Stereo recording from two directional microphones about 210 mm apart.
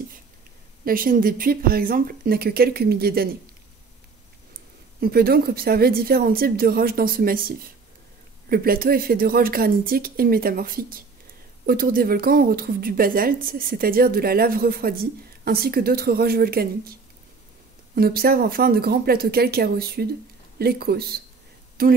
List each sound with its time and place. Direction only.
0.8 s speech: 45° right (ahead or behind)
5.0 s speech: 45° right (ahead or behind)
17.9 s speech: 45° right (ahead or behind)